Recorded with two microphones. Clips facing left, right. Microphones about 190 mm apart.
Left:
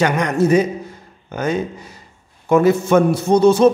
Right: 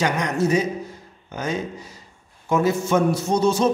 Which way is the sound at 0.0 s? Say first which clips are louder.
Left 5 dB; 55° left (ahead or behind).